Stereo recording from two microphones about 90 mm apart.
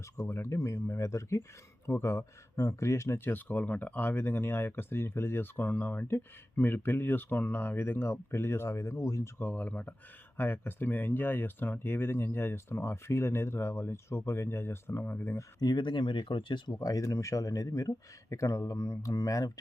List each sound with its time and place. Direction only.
0.2 s speech: 30° left (ahead or behind)
9.4 s speech: 20° left (ahead or behind)
15.6 s speech: 55° left (ahead or behind)
16.8 s speech: 40° left (ahead or behind)